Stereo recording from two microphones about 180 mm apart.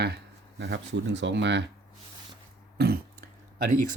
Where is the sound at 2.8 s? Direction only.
60° right (ahead or behind).